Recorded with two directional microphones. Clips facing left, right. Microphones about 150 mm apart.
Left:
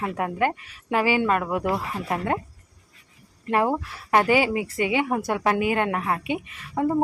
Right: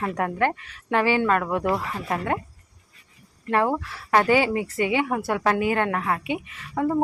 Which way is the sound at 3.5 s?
15° left (ahead or behind).